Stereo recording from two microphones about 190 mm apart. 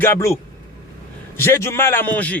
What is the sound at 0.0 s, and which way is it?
Speech, 15° left (ahead or behind).